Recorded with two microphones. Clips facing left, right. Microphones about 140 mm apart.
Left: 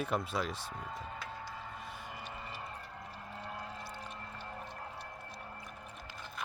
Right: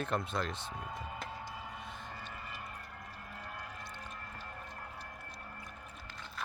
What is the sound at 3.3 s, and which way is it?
Music, 25° left (ahead or behind).